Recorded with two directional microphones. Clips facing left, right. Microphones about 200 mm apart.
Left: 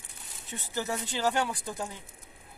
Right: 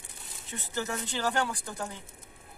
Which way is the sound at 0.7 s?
20° left (ahead or behind).